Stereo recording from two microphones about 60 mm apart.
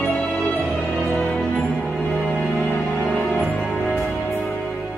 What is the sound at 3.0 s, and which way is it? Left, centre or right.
Music, centre.